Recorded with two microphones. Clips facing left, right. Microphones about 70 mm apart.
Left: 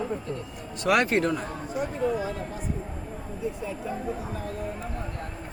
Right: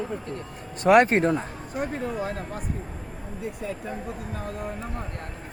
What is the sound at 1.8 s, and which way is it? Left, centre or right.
Speech, right.